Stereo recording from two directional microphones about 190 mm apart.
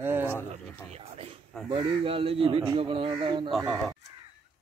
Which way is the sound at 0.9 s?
30° right (ahead or behind).